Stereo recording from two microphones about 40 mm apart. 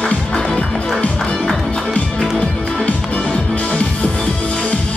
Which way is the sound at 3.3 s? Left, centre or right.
Left.